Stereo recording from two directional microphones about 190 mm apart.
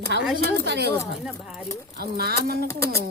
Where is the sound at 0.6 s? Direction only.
60° right (ahead or behind).